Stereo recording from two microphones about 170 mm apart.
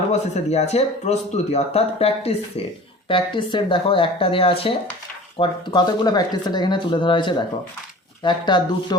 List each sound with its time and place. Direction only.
0.1 s speech: 40° left (ahead or behind)